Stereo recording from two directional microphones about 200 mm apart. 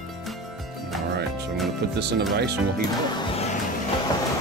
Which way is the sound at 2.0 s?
55° right (ahead or behind).